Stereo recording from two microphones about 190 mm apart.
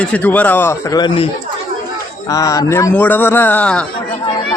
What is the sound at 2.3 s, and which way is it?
A man's voice, 15° left (ahead or behind).